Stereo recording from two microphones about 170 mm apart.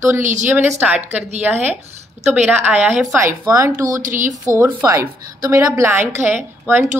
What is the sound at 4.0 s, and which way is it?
Speech, 50° right (ahead or behind).